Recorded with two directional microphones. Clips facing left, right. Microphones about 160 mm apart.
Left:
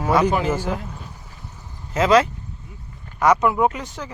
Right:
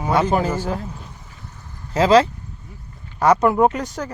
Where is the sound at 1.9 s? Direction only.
30° right (ahead or behind).